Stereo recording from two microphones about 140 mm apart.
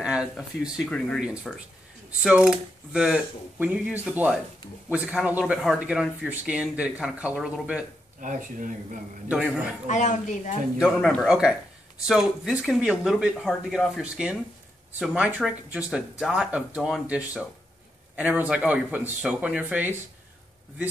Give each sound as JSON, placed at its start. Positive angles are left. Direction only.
{"t": 0.0, "sound": "speech", "side_deg": -5}
{"t": 1.2, "sound": "speech", "side_deg": -5}
{"t": 8.2, "sound": "speech", "side_deg": -65}
{"t": 9.8, "sound": "speech", "side_deg": 60}
{"t": 10.8, "sound": "speech", "side_deg": 0}